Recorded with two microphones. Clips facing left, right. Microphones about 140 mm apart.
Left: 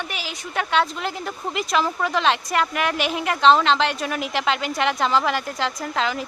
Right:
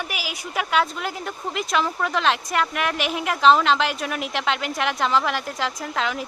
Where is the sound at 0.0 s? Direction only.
5° right (ahead or behind).